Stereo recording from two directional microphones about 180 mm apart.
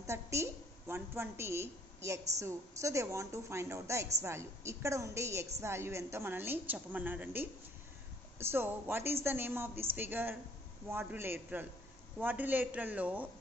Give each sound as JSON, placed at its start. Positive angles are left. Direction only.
{"t": 0.1, "sound": "a woman's voice", "side_deg": -15}